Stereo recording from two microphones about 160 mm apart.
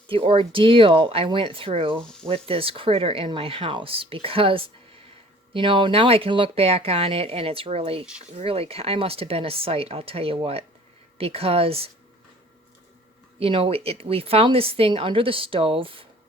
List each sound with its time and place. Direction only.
0.1 s a woman's voice: 35° right (ahead or behind)
13.4 s a woman's voice: 35° right (ahead or behind)